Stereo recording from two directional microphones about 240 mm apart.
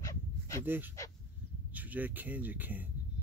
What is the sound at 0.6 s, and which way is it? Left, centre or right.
Speech, centre.